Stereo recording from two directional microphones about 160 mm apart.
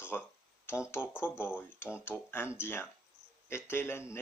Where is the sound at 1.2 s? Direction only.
15° left (ahead or behind).